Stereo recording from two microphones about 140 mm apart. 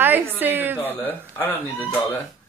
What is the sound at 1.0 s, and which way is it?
Speech, 15° left (ahead or behind).